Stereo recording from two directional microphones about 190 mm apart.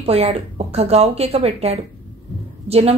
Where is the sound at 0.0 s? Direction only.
30° right (ahead or behind).